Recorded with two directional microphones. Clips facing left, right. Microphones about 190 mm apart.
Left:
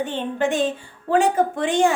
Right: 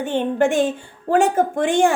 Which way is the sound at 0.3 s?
50° right (ahead or behind).